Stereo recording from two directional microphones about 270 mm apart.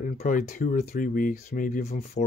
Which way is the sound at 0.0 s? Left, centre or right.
Left.